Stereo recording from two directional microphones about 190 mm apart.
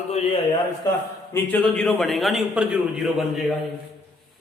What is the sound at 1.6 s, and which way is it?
A man's voice, 5° left (ahead or behind).